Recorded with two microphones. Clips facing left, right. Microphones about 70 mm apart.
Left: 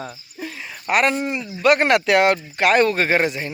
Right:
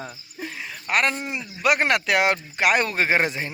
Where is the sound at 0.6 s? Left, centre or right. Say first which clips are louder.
Left 4 dB; centre.